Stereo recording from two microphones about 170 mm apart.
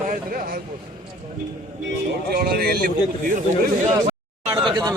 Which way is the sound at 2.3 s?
65° right (ahead or behind).